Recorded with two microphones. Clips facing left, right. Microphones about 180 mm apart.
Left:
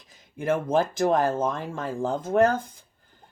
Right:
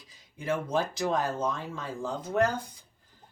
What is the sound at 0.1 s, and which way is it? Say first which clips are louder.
Speech: left 6 dB; 50° left (ahead or behind).